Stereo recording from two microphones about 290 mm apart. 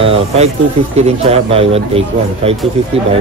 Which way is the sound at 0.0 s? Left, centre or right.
Centre.